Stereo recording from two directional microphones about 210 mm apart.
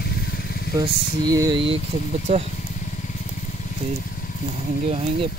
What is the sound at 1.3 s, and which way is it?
Speech, 20° right (ahead or behind).